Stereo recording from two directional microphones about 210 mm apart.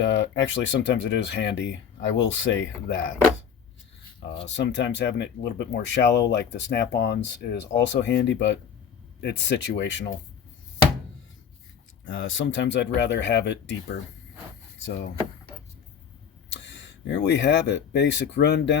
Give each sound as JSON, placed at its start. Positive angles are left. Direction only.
{"t": 0.0, "sound": "speech", "side_deg": 60}
{"t": 4.4, "sound": "speech", "side_deg": 60}
{"t": 12.0, "sound": "speech", "side_deg": 65}
{"t": 16.5, "sound": "speech", "side_deg": 60}